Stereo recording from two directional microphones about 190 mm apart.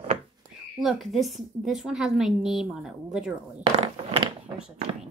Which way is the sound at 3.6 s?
30° right (ahead or behind).